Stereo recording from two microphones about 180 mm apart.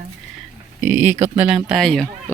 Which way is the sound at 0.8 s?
10° right (ahead or behind).